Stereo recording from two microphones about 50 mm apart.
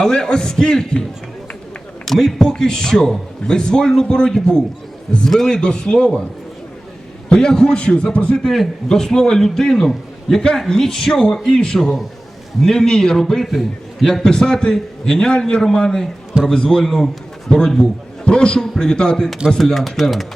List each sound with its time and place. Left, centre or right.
0.0 s a man's voice: centre
2.0 s a man's voice: centre
7.3 s a man's voice: centre
8.4 s a man's voice: centre
14.1 s a man's voice: centre